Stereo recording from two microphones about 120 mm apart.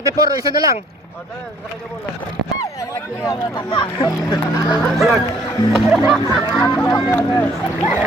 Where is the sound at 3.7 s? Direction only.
40° left (ahead or behind).